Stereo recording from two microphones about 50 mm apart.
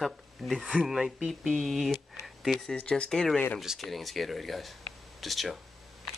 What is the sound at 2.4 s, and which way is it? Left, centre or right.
Speech, centre.